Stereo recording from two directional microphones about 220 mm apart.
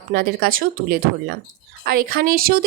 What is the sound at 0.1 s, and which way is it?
Speech, 40° right (ahead or behind).